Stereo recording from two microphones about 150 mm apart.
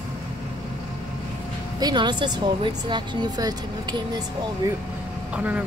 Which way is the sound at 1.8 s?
30° right (ahead or behind).